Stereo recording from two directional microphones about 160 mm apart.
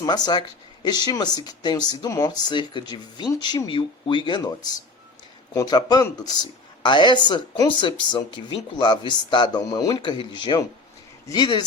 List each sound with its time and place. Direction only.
0.0 s speech: 25° left (ahead or behind)